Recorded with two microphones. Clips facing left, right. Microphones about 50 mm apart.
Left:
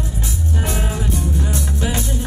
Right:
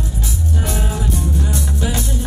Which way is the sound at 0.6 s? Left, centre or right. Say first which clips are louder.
Even; left.